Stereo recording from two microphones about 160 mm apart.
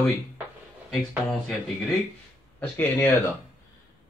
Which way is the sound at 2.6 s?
10° left (ahead or behind).